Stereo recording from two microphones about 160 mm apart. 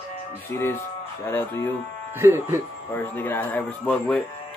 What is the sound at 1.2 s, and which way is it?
Speech, 15° left (ahead or behind).